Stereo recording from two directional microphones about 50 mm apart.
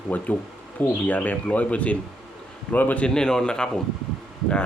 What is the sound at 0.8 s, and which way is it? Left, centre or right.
Speech, left.